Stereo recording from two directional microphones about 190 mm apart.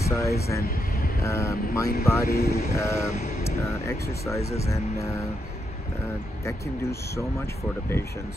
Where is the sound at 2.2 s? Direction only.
55° left (ahead or behind).